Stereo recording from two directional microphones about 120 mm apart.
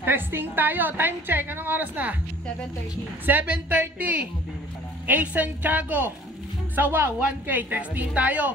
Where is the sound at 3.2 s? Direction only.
15° right (ahead or behind).